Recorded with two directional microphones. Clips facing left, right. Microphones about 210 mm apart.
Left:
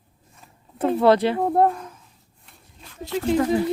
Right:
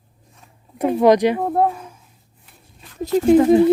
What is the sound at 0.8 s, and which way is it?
Speech, 15° right (ahead or behind).